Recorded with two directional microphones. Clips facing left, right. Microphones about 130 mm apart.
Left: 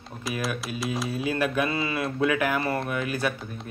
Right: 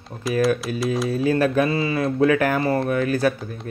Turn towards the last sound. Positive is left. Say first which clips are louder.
# right 7 dB
turn(degrees=-40)  # may be behind; listen again after turning